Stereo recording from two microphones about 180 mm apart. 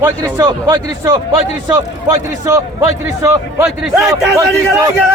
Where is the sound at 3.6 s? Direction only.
Centre (ahead or behind).